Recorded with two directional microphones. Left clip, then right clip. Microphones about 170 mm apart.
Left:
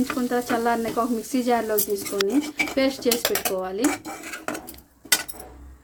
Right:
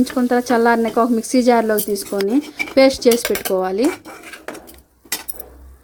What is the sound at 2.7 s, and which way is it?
Speech, 45° right (ahead or behind).